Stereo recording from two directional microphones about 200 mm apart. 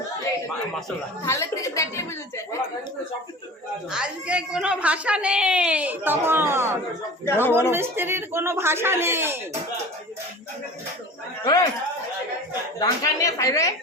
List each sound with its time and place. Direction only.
1.2 s a woman's voice: 15° left (ahead or behind)
3.9 s a woman's voice: 5° right (ahead or behind)
7.3 s a woman's voice: 10° left (ahead or behind)
7.7 s speech: 10° right (ahead or behind)
11.4 s speech: 20° left (ahead or behind)
12.8 s a woman's voice: 15° left (ahead or behind)